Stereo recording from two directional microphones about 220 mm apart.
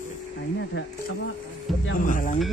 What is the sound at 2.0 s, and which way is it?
Speech, 35° left (ahead or behind).